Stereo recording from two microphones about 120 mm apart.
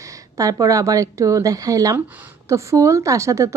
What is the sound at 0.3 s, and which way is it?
A woman's voice, 30° right (ahead or behind).